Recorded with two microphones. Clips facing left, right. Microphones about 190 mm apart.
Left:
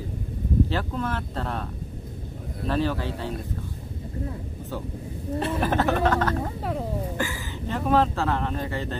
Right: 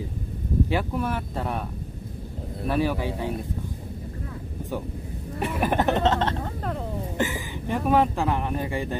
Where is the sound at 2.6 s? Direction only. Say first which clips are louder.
Right 1 dB; 10° right (ahead or behind).